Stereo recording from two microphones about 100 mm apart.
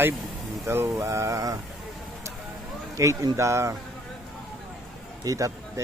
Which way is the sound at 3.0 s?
30° right (ahead or behind).